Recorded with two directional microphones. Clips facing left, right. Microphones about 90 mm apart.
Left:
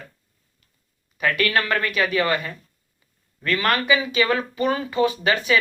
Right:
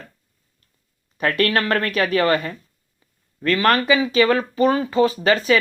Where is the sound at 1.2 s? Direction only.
40° right (ahead or behind).